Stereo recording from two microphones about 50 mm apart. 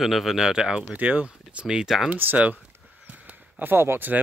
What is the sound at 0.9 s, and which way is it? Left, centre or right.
Speech, right.